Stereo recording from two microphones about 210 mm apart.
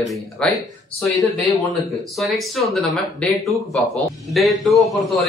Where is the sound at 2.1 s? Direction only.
Centre (ahead or behind).